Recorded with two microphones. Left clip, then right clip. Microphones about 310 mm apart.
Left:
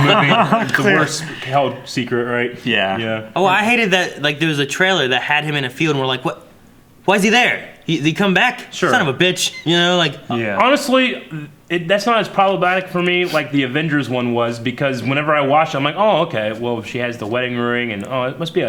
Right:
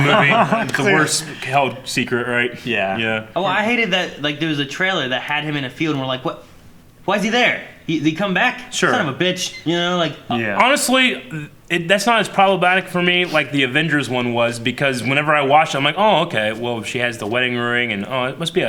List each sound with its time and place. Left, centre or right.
0.3 s speech: centre
1.0 s speech: left
2.6 s speech: centre
3.0 s speech: left
3.3 s a man's voice: right
10.6 s a man's voice: left